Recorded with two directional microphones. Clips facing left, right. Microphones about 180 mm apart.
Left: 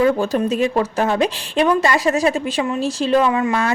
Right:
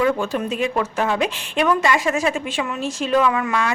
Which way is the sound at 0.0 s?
35° left (ahead or behind).